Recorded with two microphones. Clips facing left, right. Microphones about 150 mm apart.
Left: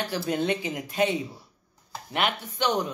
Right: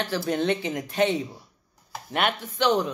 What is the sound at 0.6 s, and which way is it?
Speech, 40° right (ahead or behind).